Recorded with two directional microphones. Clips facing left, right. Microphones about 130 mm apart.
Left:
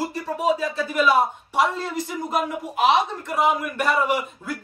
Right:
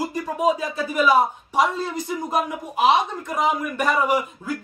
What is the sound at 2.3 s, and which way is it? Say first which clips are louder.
Speech: even; 15° right (ahead or behind).